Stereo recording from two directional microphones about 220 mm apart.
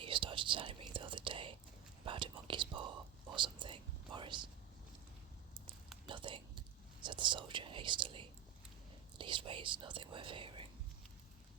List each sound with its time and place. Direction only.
0.0 s whispering: 25° right (ahead or behind)
6.1 s whispering: 20° right (ahead or behind)